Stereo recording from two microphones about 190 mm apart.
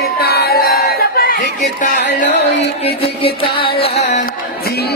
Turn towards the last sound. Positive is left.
turn(degrees=30)  # may be behind; listen again after turning